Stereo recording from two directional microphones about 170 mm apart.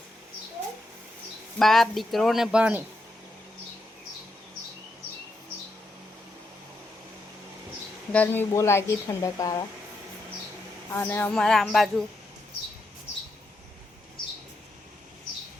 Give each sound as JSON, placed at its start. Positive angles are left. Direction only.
{"t": 1.5, "sound": "speech", "side_deg": 0}
{"t": 8.1, "sound": "speech", "side_deg": 10}
{"t": 10.9, "sound": "speech", "side_deg": 10}